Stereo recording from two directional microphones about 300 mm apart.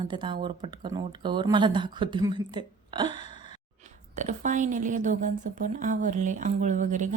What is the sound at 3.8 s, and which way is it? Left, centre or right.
Speech, right.